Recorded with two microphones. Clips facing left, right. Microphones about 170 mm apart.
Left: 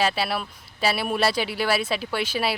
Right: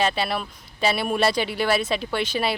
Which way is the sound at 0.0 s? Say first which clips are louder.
Right 1 dB; 5° left (ahead or behind).